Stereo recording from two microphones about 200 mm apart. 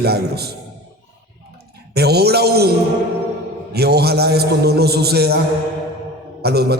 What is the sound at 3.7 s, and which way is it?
A man's voice, 55° right (ahead or behind).